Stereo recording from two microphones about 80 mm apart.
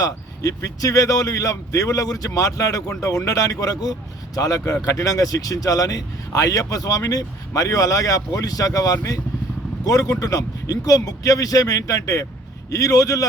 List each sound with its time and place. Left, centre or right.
0.0 s speech: left